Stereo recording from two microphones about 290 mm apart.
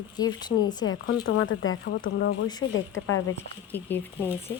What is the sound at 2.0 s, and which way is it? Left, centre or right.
Speech, left.